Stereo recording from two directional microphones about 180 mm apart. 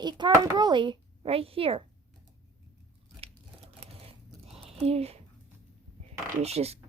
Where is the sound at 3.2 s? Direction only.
35° right (ahead or behind).